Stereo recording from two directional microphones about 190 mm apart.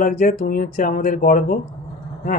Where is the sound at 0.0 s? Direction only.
50° left (ahead or behind).